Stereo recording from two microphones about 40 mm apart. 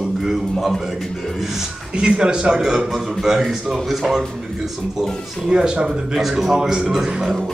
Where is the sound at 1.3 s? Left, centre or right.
Centre.